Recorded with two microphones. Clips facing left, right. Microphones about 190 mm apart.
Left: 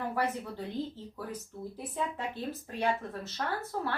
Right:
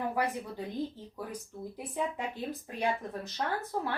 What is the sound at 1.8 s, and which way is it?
Speech, 15° right (ahead or behind).